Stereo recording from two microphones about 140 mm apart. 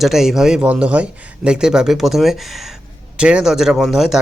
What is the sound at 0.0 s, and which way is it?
Speech, 5° right (ahead or behind).